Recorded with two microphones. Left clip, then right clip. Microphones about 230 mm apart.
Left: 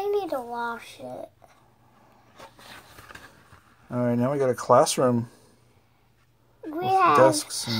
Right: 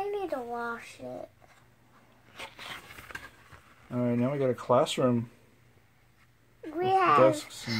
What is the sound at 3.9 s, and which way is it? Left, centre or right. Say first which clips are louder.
Speech: left 5 dB; left.